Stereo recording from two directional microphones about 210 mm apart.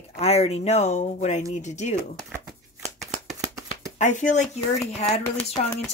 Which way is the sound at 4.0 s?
35° left (ahead or behind).